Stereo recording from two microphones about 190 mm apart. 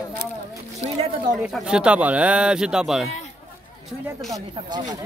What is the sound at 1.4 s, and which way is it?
Speech, 5° right (ahead or behind).